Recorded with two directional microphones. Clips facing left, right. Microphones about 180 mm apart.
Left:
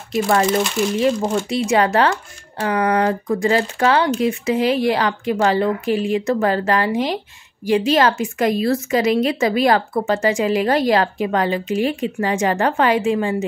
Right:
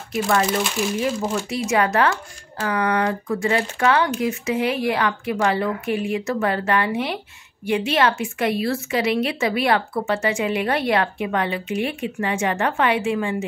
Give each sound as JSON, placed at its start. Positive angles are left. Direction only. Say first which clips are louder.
{"t": 0.9, "sound": "speech", "louder": "left 7 dB", "side_deg": 30}